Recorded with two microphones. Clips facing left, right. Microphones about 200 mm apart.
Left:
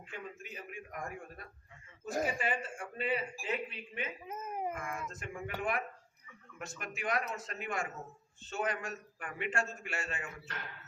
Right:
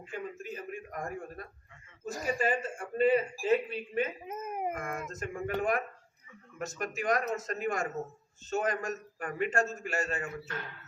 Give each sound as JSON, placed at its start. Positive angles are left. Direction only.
{"t": 0.1, "sound": "a man's voice", "side_deg": -45}
{"t": 2.4, "sound": "a man's voice", "side_deg": -40}
{"t": 4.3, "sound": "speech", "side_deg": -20}
{"t": 4.7, "sound": "a man's voice", "side_deg": -40}